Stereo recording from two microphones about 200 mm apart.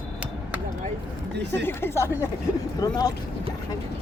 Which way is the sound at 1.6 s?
10° left (ahead or behind).